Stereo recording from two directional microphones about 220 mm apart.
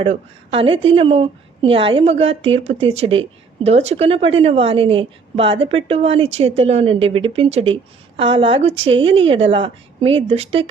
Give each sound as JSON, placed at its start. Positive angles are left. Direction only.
{"t": 0.0, "sound": "speech", "side_deg": -25}